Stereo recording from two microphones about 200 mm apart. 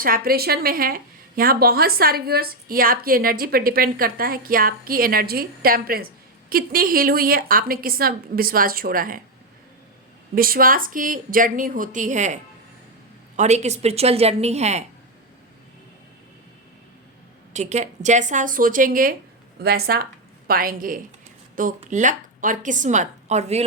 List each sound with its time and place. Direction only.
0.0 s a woman's voice: 45° right (ahead or behind)
10.3 s a woman's voice: 45° right (ahead or behind)
17.5 s a woman's voice: 35° right (ahead or behind)